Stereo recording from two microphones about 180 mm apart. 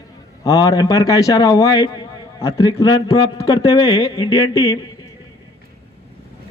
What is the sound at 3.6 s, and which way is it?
Speech, 30° left (ahead or behind).